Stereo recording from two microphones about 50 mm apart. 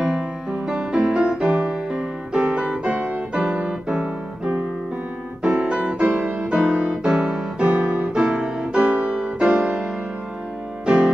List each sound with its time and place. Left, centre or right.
0.0 s music: centre
6.1 s music: right